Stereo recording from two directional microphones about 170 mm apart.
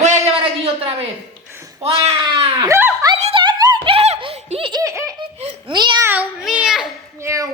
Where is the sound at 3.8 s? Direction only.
35° right (ahead or behind).